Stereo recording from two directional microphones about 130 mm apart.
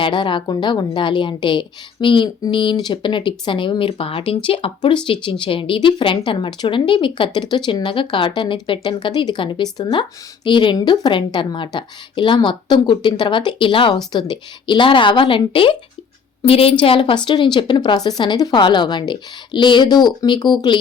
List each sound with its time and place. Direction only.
0.0 s speech: 40° left (ahead or behind)